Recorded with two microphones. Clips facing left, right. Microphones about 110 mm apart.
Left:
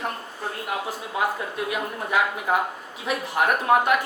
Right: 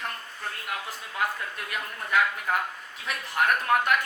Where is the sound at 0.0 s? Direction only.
20° left (ahead or behind).